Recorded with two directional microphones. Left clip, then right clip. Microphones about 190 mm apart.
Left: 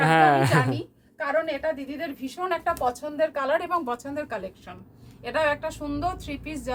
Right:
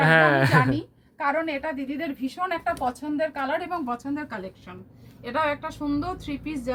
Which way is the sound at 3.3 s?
30° left (ahead or behind).